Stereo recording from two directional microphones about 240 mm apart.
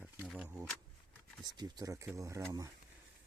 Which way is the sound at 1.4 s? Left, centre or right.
Centre.